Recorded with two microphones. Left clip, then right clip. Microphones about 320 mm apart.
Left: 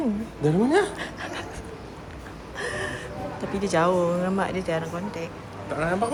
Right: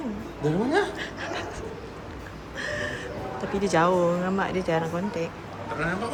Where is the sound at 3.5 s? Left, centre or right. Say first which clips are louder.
Even; centre.